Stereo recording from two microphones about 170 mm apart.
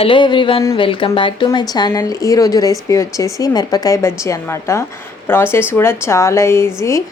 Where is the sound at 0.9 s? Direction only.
30° left (ahead or behind).